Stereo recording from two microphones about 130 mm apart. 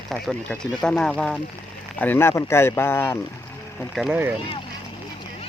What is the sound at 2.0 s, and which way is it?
Speech, 15° left (ahead or behind).